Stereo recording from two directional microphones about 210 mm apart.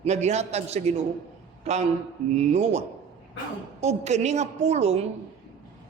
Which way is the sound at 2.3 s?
30° right (ahead or behind).